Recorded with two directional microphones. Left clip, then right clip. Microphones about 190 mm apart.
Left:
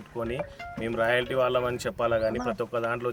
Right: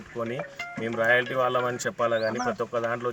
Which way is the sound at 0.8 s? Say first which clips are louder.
Right 2 dB; 25° left (ahead or behind).